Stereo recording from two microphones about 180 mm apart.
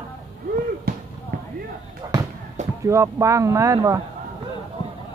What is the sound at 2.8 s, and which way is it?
Speech, 15° right (ahead or behind).